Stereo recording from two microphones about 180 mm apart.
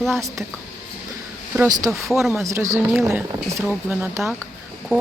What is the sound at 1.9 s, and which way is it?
Speech, centre (ahead or behind).